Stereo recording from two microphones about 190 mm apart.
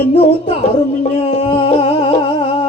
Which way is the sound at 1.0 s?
30° left (ahead or behind).